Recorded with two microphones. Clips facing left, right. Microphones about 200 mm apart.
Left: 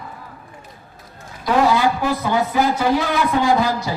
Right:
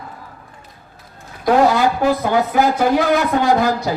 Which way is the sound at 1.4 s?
50° right (ahead or behind).